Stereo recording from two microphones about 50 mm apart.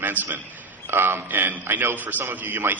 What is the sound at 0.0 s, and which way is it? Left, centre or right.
A man's voice, right.